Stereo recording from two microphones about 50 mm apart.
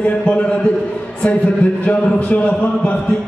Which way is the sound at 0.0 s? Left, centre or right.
Left.